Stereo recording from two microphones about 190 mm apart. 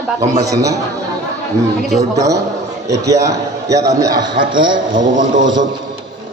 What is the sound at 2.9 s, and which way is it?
A man's voice, 20° right (ahead or behind).